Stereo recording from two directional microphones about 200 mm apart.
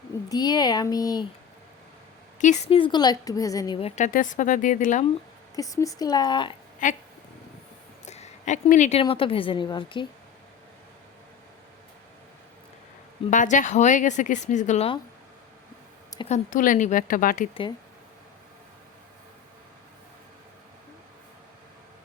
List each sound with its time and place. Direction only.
0.3 s a woman's voice: 20° left (ahead or behind)
2.4 s a woman's voice: 30° left (ahead or behind)
3.8 s a woman's voice: 30° left (ahead or behind)
5.5 s a woman's voice: 15° left (ahead or behind)
6.8 s a woman's voice: 40° left (ahead or behind)
8.0 s a woman's voice: 35° left (ahead or behind)
13.3 s a woman's voice: 40° left (ahead or behind)
16.3 s a woman's voice: 40° left (ahead or behind)
17.5 s a woman's voice: 25° left (ahead or behind)